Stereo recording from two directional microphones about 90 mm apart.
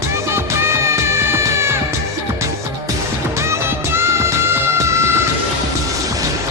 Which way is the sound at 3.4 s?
30° right (ahead or behind).